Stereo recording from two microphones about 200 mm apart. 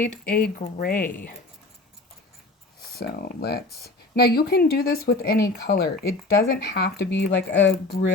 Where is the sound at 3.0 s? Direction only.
55° left (ahead or behind).